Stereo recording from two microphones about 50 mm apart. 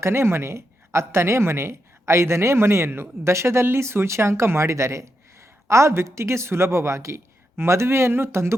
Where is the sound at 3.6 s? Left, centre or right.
Right.